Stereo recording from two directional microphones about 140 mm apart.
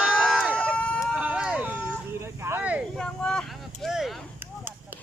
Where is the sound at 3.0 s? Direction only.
5° left (ahead or behind).